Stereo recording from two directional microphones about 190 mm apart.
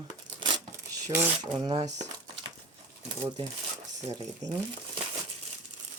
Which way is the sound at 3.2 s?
20° right (ahead or behind).